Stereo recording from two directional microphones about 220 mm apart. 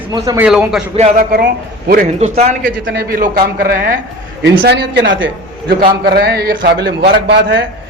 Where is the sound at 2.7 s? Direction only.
55° right (ahead or behind); by 4.0 s 40° right (ahead or behind).